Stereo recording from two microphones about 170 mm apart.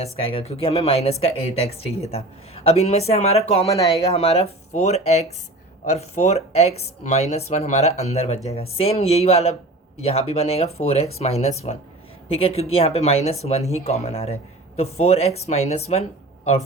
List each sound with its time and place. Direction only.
0.0 s speech: 35° left (ahead or behind)